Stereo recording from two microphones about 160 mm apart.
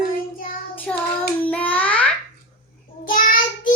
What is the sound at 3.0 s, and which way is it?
Child singing, 60° left (ahead or behind).